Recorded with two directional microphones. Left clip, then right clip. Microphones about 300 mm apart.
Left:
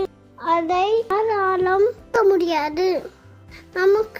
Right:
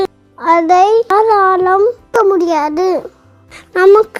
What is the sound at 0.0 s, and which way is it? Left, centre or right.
Music, right.